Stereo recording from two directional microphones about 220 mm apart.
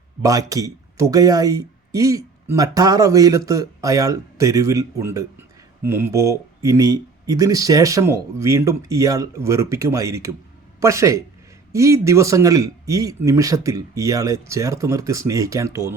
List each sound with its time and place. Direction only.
0.2 s speech: 15° right (ahead or behind)